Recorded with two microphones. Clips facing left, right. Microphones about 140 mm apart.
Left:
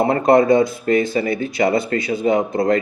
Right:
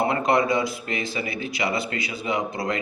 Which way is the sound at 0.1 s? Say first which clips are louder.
Left 8 dB; 45° left (ahead or behind).